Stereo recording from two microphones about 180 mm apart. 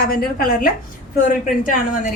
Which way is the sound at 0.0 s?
55° left (ahead or behind).